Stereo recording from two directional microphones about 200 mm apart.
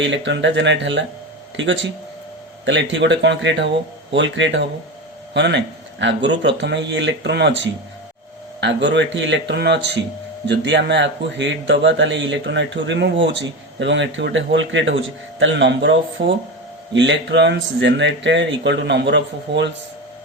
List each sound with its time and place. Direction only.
0.0 s a man's voice: 65° right (ahead or behind)